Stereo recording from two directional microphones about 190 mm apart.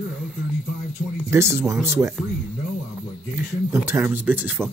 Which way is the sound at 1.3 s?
15° right (ahead or behind).